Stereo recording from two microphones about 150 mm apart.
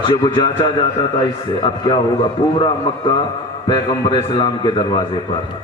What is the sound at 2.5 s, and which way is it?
A man's voice, 30° left (ahead or behind).